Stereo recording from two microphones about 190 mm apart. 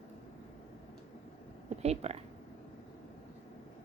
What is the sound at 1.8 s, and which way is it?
Speech, 35° right (ahead or behind).